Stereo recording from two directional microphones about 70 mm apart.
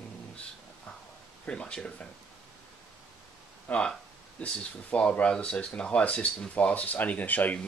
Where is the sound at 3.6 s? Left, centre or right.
Centre.